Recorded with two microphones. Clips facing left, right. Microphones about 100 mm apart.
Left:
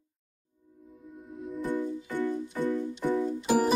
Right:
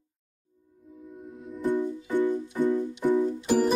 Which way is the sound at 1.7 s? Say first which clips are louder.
Right 6 dB; 15° right (ahead or behind).